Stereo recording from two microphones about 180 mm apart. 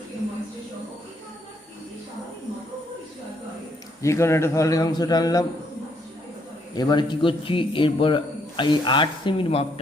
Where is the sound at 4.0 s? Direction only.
15° left (ahead or behind).